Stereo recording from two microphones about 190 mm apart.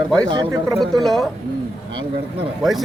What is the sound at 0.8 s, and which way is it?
Speech, centre (ahead or behind).